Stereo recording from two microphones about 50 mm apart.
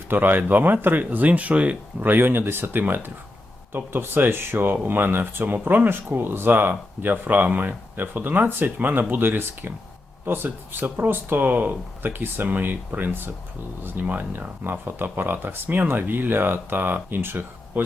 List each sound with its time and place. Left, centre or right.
0.1 s speech: right
2.0 s speech: right